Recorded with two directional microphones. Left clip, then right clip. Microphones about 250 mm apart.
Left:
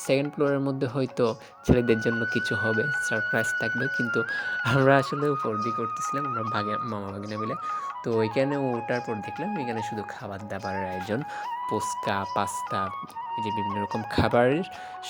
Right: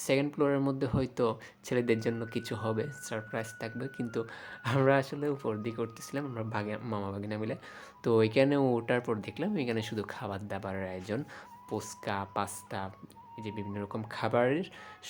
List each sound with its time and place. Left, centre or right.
0.1 s speech: centre